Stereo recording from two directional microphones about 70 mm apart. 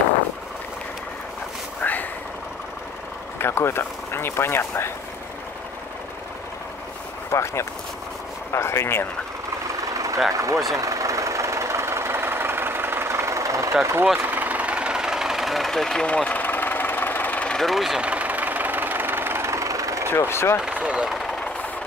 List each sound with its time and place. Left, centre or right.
1.8 s vehicle: left
3.3 s speech: left
7.2 s speech: left
9.9 s vehicle: right
10.3 s speech: right
10.7 s vehicle: right
14.2 s engine: right; by 16.1 s centre
16.1 s engine: centre
17.5 s speech: centre
18.0 s vehicle: right
20.1 s speech: left
20.8 s speech: centre